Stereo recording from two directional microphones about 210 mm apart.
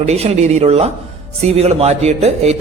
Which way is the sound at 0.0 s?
30° right (ahead or behind).